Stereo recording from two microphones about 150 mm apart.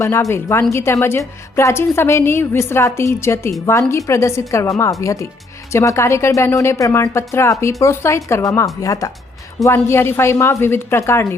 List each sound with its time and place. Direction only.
0.0 s a woman's voice: 20° left (ahead or behind)